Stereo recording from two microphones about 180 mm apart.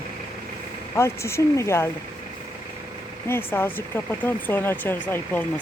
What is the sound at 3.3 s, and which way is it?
Speech, 10° left (ahead or behind).